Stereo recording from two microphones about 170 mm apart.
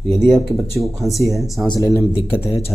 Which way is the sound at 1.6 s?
25° left (ahead or behind).